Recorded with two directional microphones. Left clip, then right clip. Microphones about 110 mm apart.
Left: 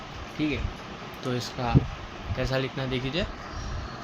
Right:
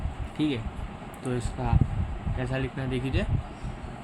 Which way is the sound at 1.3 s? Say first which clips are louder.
Left 1 dB; 5° left (ahead or behind).